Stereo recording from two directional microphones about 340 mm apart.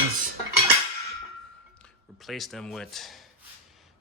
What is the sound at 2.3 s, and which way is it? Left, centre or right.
Speech, centre.